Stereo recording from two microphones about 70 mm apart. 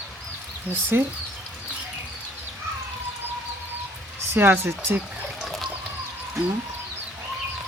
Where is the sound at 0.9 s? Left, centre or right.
Right.